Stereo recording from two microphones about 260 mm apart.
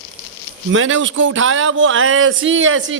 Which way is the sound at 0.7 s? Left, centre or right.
Right.